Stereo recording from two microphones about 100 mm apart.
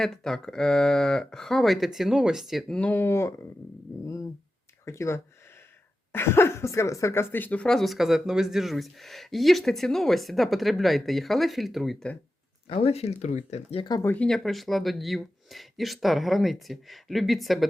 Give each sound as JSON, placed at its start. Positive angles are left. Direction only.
{"t": 0.0, "sound": "speech", "side_deg": 5}
{"t": 2.7, "sound": "speech", "side_deg": 10}
{"t": 3.0, "sound": "speech", "side_deg": 25}
{"t": 4.0, "sound": "a sound", "side_deg": 35}
{"t": 4.9, "sound": "speech", "side_deg": 25}
{"t": 12.6, "sound": "speech", "side_deg": 75}
{"t": 14.0, "sound": "speech", "side_deg": 20}
{"t": 14.3, "sound": "speech", "side_deg": 0}